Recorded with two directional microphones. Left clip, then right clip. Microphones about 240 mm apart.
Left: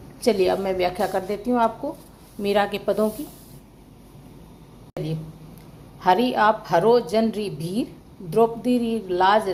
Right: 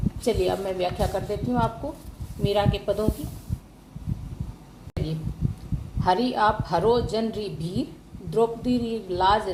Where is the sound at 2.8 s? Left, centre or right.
Left.